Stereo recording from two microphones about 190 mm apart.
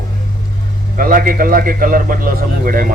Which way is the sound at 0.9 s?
45° right (ahead or behind).